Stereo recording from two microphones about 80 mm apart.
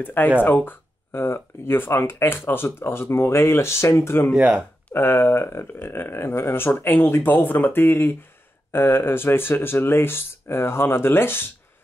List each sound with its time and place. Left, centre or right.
0.0 s speech: left